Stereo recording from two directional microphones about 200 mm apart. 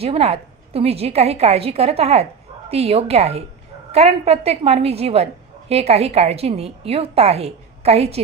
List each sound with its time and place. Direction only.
0.0 s a woman's voice: 30° right (ahead or behind)